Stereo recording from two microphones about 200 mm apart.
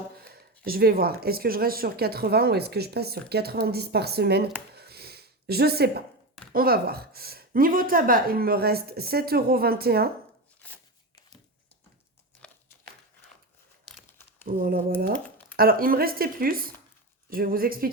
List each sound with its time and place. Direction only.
0.2 s speech: 50° right (ahead or behind)
4.8 s snort: 50° right (ahead or behind)
6.5 s speech: 50° right (ahead or behind)
14.4 s speech: 45° right (ahead or behind)